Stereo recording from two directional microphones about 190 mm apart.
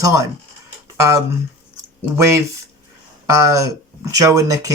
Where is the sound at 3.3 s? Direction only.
15° right (ahead or behind).